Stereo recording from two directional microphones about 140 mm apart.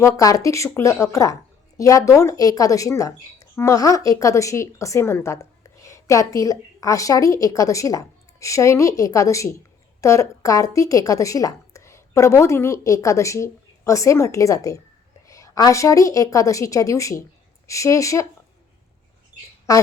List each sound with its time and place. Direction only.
0.0 s speech: 25° left (ahead or behind)
19.7 s speech: 25° left (ahead or behind)